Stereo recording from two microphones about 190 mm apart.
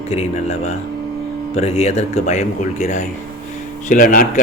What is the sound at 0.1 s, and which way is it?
Speech, 35° left (ahead or behind).